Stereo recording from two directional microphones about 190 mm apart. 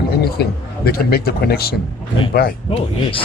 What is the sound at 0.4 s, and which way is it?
Speech, 60° left (ahead or behind).